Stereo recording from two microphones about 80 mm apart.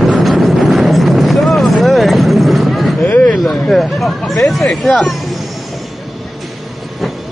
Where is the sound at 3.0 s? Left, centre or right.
Centre.